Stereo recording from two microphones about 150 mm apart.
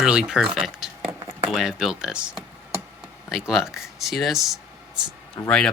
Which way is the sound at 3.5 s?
5° right (ahead or behind).